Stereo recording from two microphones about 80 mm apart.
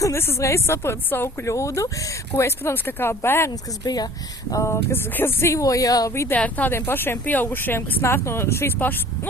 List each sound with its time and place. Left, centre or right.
0.0 s speech: left
3.5 s speech: left
4.5 s speech: left
6.3 s speech: centre